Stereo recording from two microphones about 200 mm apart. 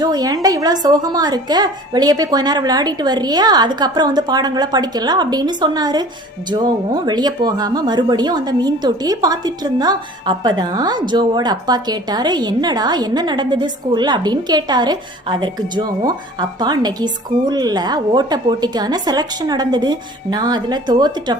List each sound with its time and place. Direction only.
0.0 s a woman's voice: 20° right (ahead or behind)